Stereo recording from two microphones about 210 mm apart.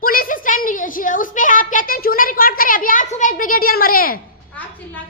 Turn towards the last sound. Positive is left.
turn(degrees=45)  # may be behind; listen again after turning